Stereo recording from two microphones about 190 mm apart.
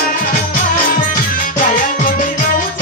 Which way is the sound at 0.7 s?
45° left (ahead or behind).